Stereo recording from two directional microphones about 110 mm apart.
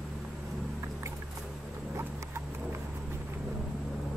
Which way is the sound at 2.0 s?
25° right (ahead or behind).